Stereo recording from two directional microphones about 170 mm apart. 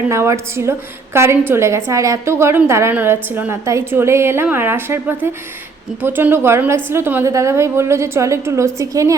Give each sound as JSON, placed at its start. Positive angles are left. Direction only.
{"t": 0.1, "sound": "a woman's voice", "side_deg": -15}